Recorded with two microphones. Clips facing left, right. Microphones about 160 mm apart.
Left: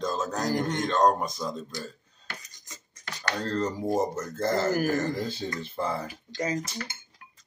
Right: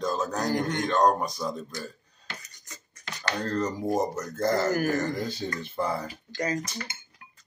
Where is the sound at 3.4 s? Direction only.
30° left (ahead or behind).